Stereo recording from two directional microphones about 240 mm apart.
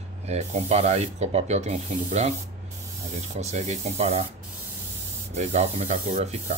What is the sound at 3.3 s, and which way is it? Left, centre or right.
Speech, right.